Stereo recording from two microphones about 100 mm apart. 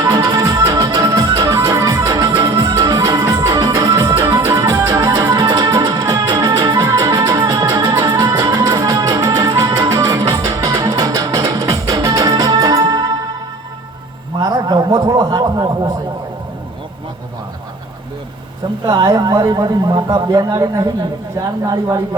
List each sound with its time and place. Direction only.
0.0 s music: 40° right (ahead or behind)
14.3 s a sound: 40° right (ahead or behind)
18.9 s speech: 45° right (ahead or behind)